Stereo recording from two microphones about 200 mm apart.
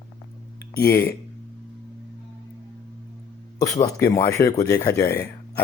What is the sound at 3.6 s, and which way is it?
Speech, 15° left (ahead or behind).